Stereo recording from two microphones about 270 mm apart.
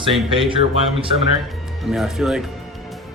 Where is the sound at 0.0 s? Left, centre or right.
Centre.